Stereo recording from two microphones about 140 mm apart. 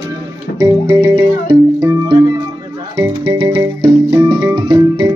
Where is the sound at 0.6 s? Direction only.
25° right (ahead or behind).